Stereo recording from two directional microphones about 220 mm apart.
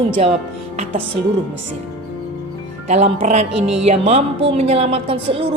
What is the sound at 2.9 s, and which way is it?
A woman's voice, 30° right (ahead or behind).